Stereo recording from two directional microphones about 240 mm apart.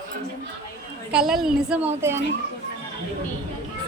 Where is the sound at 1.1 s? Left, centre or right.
Centre.